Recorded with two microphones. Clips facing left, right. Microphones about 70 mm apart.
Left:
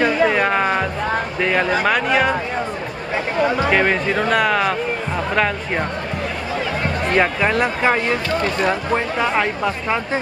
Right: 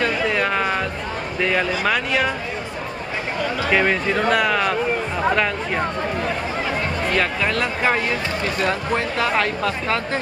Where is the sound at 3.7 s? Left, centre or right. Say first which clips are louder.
Left 1 dB; centre.